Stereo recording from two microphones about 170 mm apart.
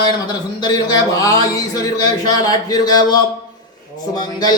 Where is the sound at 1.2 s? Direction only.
20° left (ahead or behind).